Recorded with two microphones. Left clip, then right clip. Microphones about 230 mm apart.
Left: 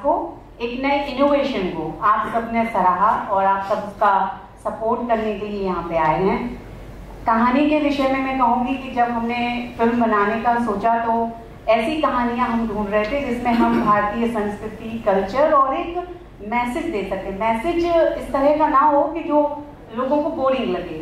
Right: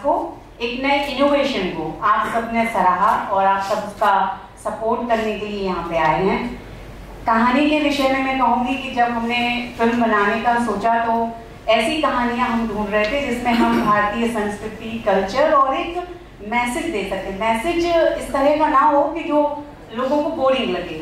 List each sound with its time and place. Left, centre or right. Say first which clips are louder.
0.0 s a sound: even; left
0.6 s a woman's voice: right 2 dB; centre; by 20.4 s left
20.4 s a woman's voice: right 2 dB; centre